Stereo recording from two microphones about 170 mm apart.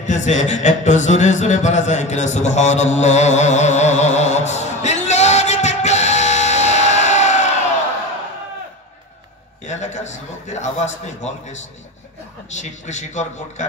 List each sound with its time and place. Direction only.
0.0 s a man's voice: 45° left (ahead or behind)
9.7 s a sound: 45° left (ahead or behind)
12.5 s a man's voice: 45° left (ahead or behind)